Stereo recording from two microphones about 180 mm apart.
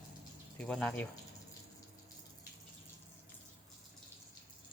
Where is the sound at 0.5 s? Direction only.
5° left (ahead or behind).